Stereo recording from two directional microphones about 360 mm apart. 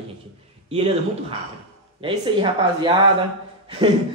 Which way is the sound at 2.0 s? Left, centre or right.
Centre.